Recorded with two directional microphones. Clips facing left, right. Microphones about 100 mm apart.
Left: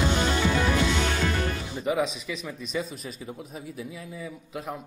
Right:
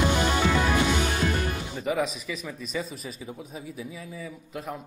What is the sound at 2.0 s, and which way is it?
Speech, centre (ahead or behind).